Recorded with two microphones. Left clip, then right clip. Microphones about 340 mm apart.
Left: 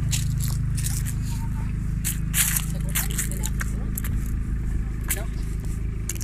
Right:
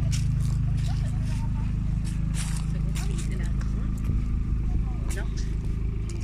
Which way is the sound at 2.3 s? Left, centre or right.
Left.